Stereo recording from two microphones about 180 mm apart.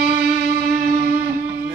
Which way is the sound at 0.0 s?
55° right (ahead or behind).